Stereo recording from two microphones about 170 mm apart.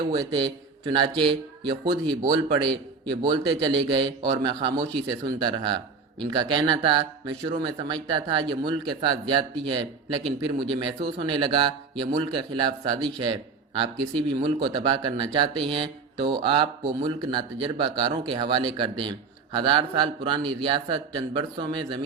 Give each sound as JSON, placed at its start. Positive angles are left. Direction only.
{"t": 0.1, "sound": "speech", "side_deg": -25}